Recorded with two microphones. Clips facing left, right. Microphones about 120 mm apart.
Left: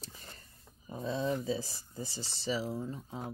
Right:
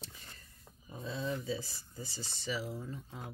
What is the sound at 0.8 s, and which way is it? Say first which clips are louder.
Speech: left 5 dB; 35° left (ahead or behind).